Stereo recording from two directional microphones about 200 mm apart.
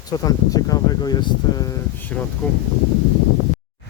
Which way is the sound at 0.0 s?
20° left (ahead or behind).